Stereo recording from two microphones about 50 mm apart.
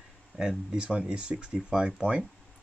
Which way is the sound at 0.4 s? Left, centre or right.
Centre.